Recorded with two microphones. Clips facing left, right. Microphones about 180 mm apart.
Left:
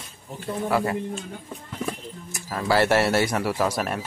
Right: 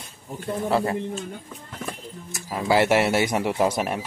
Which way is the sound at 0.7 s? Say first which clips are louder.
Right 1 dB; 25° right (ahead or behind).